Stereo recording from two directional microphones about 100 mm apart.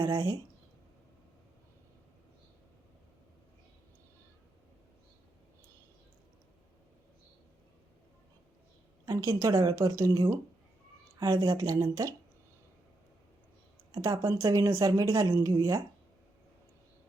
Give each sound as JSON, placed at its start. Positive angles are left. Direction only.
{"t": 0.0, "sound": "speech", "side_deg": -40}
{"t": 9.0, "sound": "a woman's voice", "side_deg": -35}
{"t": 11.5, "sound": "speech", "side_deg": -35}
{"t": 13.9, "sound": "speech", "side_deg": -35}